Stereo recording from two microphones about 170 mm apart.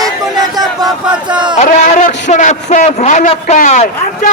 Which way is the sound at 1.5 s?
45° left (ahead or behind).